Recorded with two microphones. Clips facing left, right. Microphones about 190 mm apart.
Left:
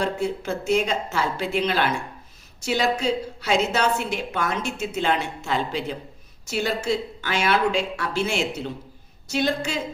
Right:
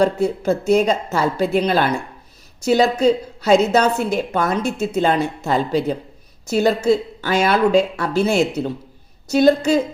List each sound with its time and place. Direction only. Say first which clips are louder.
0.0 s a woman's voice: right 8 dB; 40° right (ahead or behind)